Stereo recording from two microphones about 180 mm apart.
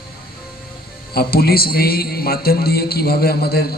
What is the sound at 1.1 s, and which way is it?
A man's voice, 60° left (ahead or behind).